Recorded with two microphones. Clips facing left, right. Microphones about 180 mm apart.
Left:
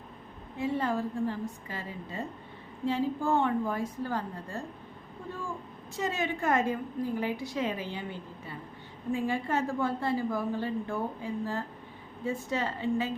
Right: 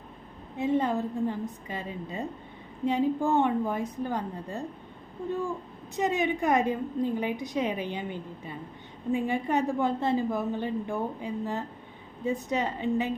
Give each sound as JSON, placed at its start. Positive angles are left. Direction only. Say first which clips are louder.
{"t": 0.5, "sound": "a woman's voice", "louder": "right 4 dB", "side_deg": -20}
{"t": 6.0, "sound": "a woman's voice", "louder": "right 5 dB", "side_deg": -20}